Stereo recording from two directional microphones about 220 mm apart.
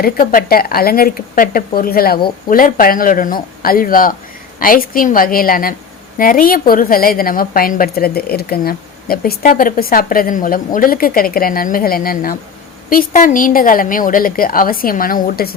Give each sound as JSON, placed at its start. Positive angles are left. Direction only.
{"t": 0.0, "sound": "a woman's voice", "side_deg": 40}